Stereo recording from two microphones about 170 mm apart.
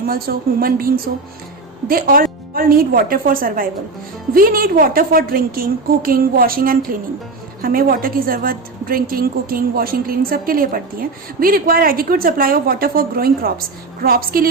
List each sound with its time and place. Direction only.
0.0 s a woman's voice: 60° right (ahead or behind)